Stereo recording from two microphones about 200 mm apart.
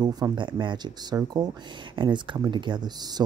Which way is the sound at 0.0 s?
20° right (ahead or behind).